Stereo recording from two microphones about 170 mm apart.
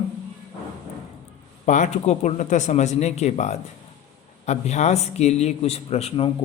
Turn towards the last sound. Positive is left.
turn(degrees=35)  # may be behind; listen again after turning